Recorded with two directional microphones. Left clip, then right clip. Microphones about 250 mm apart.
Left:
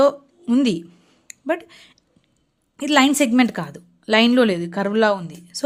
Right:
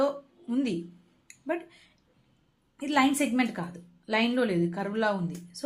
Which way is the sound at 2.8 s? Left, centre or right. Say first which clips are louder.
Left 9 dB; left.